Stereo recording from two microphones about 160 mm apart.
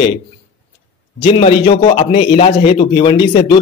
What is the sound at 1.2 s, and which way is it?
A man's voice, 35° left (ahead or behind).